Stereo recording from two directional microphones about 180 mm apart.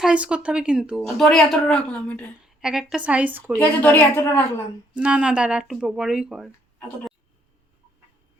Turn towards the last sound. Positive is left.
turn(degrees=0)  # may be behind; listen again after turning